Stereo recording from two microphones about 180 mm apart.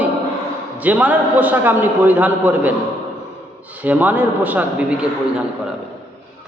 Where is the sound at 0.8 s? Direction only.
10° right (ahead or behind).